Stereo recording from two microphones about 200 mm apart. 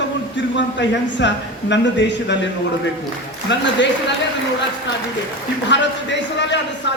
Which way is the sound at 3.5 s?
60° left (ahead or behind).